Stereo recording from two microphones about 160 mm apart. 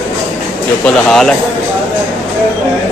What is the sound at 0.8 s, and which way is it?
Speech, 5° left (ahead or behind).